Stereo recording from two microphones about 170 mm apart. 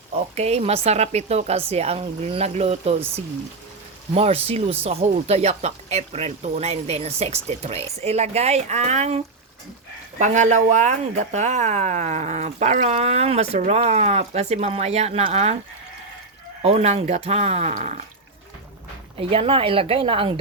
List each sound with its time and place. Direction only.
0.3 s speech: 40° right (ahead or behind)
4.1 s speech: 35° right (ahead or behind)
16.6 s speech: 40° right (ahead or behind)
19.1 s speech: 35° right (ahead or behind)